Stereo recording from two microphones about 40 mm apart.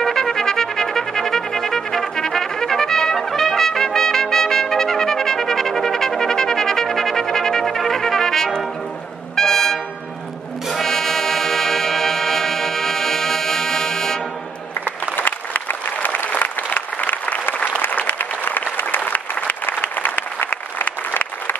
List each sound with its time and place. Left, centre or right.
0.0 s trumpet: centre
9.3 s music: centre
14.9 s applause: left
18.9 s applause: left